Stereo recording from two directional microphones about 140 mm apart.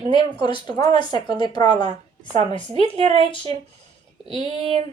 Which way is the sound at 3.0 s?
45° right (ahead or behind).